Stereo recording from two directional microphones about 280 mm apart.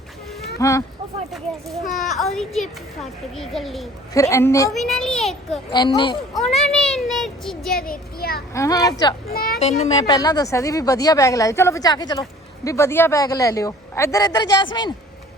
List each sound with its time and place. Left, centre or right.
0.6 s speech: centre
2.0 s a child's voice: centre
4.1 s a child's voice: centre
5.7 s speech: centre
6.3 s a child's voice: centre
7.8 s a child's voice: left
8.5 s speech: centre
9.3 s speech: left; by 14.9 s centre